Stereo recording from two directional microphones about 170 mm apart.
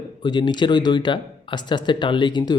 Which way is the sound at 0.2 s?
25° left (ahead or behind).